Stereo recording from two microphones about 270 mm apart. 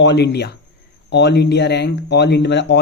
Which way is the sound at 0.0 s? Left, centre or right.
Left.